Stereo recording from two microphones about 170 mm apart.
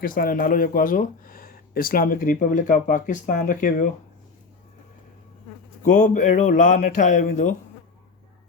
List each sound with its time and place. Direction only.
0.0 s speech: 55° left (ahead or behind)
5.8 s speech: 45° left (ahead or behind)